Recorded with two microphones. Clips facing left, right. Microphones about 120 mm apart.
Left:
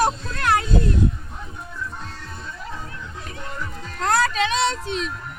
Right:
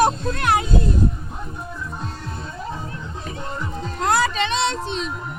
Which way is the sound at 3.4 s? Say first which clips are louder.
Right 5 dB; 25° right (ahead or behind).